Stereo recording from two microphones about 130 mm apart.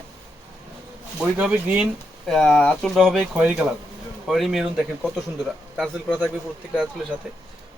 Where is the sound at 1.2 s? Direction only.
10° right (ahead or behind).